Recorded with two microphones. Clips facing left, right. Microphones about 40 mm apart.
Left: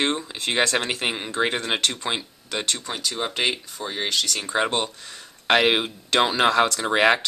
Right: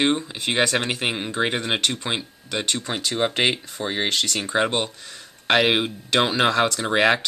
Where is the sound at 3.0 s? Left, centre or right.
Right.